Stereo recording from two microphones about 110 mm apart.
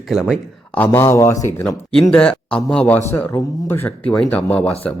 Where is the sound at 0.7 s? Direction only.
20° left (ahead or behind).